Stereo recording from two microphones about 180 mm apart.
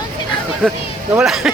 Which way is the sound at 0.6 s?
5° left (ahead or behind).